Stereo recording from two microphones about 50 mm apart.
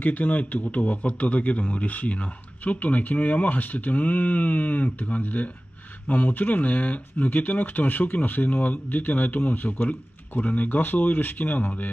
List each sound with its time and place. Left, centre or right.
0.0 s a man's voice: left